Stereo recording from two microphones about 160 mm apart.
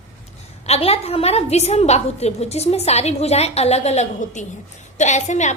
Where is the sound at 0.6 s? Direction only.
40° left (ahead or behind).